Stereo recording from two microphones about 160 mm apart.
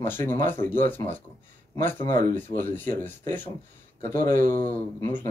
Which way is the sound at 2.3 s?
15° left (ahead or behind).